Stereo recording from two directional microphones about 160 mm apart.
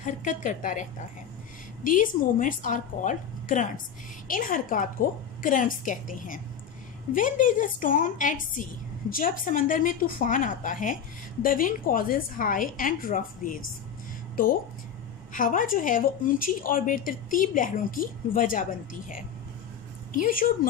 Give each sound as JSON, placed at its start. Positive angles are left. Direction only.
{"t": 0.0, "sound": "a woman's voice", "side_deg": 55}
{"t": 1.9, "sound": "a woman's voice", "side_deg": 55}